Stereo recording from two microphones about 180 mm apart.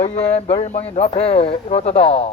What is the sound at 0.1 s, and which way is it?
Speech, 35° left (ahead or behind).